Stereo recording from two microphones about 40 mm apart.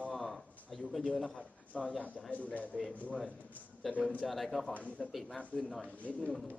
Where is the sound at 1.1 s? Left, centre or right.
Centre.